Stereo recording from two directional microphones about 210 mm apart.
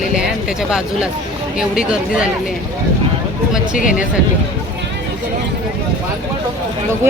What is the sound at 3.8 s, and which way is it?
Speech, 40° left (ahead or behind).